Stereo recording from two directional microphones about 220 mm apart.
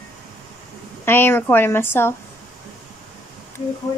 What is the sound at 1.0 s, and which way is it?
A woman's voice, 10° left (ahead or behind).